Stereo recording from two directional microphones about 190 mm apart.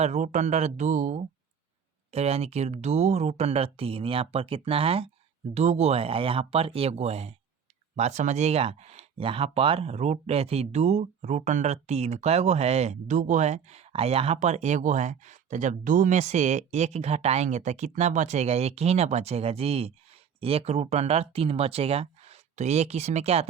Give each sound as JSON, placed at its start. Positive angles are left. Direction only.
{"t": 0.0, "sound": "speech", "side_deg": -35}